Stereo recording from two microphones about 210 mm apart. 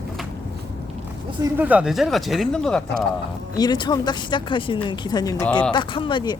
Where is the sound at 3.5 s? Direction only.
20° left (ahead or behind).